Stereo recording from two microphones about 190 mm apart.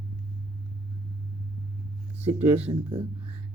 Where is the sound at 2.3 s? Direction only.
30° right (ahead or behind).